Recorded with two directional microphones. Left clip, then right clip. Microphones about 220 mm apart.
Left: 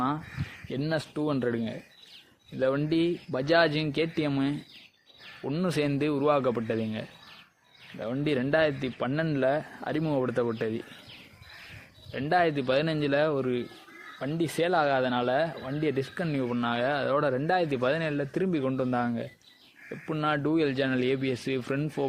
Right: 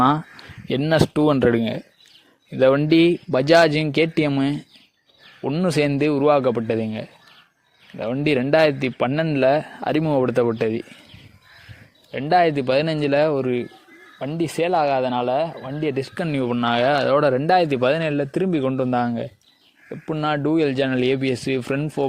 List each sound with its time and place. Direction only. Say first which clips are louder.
0.7 s speech: right 12 dB; 40° right (ahead or behind)
12.1 s speech: right 8 dB; 30° right (ahead or behind)
16.1 s speech: right 7 dB; 40° right (ahead or behind)